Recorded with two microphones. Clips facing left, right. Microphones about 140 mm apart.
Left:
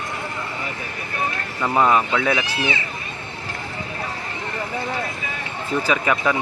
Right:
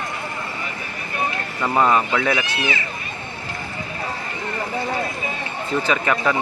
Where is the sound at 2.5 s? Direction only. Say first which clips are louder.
Even; 30° left (ahead or behind).